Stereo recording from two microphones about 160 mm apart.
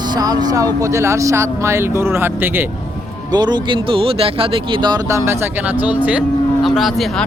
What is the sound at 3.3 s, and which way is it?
Speech, 25° right (ahead or behind).